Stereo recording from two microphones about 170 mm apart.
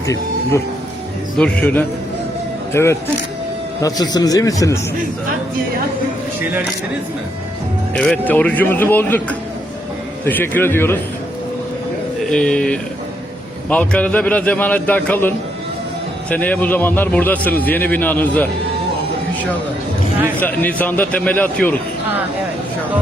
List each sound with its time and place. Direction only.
1.4 s a man's voice: 5° left (ahead or behind)
7.9 s a man's voice: 5° left (ahead or behind)
10.2 s a man's voice: 10° left (ahead or behind)
12.3 s a man's voice: 5° left (ahead or behind)
16.3 s a man's voice: 10° left (ahead or behind)
20.4 s a man's voice: 10° left (ahead or behind)